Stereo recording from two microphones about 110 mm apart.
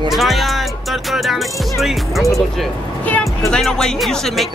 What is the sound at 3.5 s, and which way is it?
Music, 5° left (ahead or behind).